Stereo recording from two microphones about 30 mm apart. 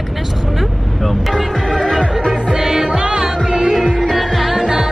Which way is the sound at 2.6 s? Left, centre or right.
Centre.